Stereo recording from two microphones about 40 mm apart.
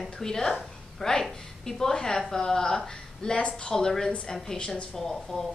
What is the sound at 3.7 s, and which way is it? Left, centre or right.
A woman's voice, centre.